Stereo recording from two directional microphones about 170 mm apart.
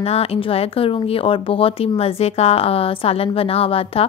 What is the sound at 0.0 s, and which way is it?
Speech, 35° left (ahead or behind).